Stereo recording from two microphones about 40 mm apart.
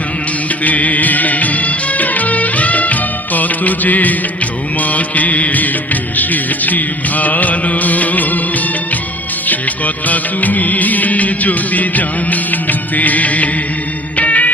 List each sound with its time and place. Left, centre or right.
0.6 s music: left
4.8 s music of bollywood: left
9.5 s music: left